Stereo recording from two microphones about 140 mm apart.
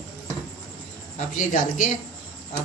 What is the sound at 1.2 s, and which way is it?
Speech, 65° left (ahead or behind).